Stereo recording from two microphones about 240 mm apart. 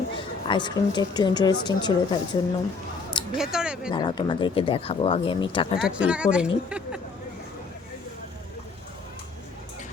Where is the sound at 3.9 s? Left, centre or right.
Centre.